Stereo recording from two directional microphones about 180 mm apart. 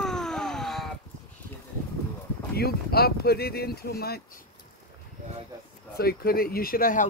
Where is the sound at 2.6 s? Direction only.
60° left (ahead or behind).